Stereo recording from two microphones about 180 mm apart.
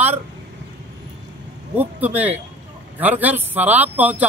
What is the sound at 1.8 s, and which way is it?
Speech, 10° right (ahead or behind).